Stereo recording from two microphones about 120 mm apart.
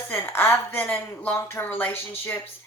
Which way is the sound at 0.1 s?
20° left (ahead or behind).